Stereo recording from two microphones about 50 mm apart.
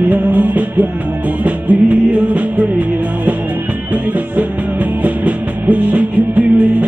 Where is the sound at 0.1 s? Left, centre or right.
Right.